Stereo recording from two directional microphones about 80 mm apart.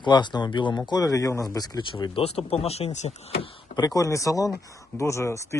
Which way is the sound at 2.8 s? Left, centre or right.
Left.